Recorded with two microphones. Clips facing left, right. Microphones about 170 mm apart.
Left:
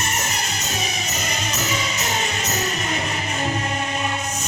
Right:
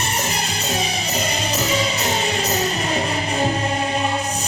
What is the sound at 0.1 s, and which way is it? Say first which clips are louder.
Music: right 3 dB; 35° right (ahead or behind).